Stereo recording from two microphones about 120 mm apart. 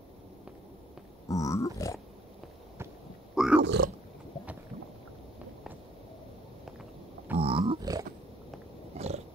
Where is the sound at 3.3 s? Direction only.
5° right (ahead or behind).